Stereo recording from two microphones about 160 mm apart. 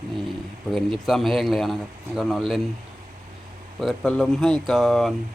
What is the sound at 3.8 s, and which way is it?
A man's voice, centre (ahead or behind).